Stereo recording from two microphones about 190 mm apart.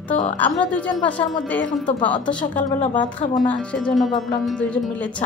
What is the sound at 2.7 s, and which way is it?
Speech, 35° left (ahead or behind).